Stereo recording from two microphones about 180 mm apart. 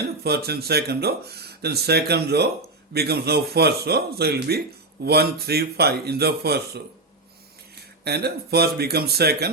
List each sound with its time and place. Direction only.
0.0 s speech: 60° right (ahead or behind)
8.0 s speech: 60° right (ahead or behind)